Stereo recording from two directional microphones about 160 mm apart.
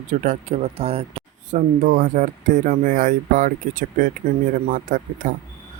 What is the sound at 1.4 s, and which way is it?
Speech, 55° right (ahead or behind).